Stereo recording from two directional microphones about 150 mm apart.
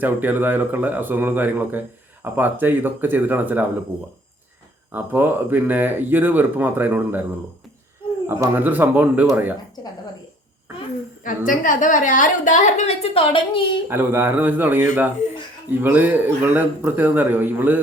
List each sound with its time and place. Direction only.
0.0 s speech: 15° right (ahead or behind)
4.9 s speech: 15° right (ahead or behind)
8.3 s speech: 15° right (ahead or behind)
11.2 s a woman's voice: 60° left (ahead or behind); by 13.7 s 35° left (ahead or behind)
13.8 s speech: 15° right (ahead or behind)